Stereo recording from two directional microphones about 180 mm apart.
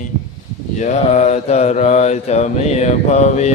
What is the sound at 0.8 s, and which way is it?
Mantra, 40° left (ahead or behind).